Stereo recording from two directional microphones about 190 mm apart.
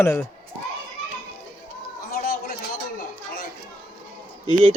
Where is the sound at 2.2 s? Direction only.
50° left (ahead or behind).